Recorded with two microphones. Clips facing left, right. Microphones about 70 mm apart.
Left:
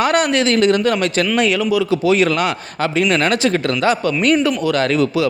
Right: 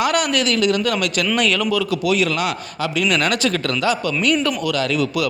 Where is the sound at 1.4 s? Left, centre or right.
Centre.